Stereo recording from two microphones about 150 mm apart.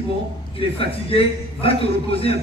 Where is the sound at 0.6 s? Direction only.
40° left (ahead or behind).